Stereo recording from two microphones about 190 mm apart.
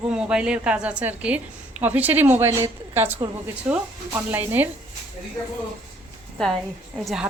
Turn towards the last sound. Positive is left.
turn(degrees=0)  # may be behind; listen again after turning